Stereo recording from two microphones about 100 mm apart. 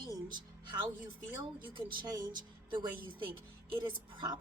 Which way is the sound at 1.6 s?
55° right (ahead or behind).